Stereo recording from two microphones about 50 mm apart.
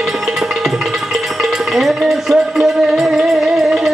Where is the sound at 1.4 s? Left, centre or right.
Centre.